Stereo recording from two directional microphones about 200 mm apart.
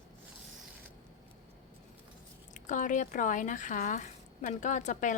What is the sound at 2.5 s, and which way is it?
Speech, 40° left (ahead or behind).